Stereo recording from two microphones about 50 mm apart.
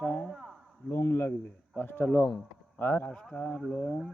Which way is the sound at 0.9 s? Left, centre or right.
Left.